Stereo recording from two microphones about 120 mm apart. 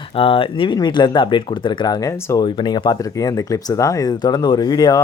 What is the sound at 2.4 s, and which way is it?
Speech, 40° left (ahead or behind).